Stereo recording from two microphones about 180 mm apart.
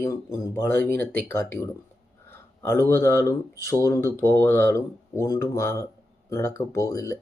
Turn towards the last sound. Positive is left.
turn(degrees=15)  # may be behind; listen again after turning